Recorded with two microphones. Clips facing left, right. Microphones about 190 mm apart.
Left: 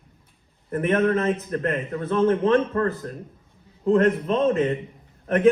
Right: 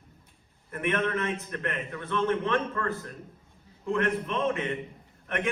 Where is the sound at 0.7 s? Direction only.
35° left (ahead or behind).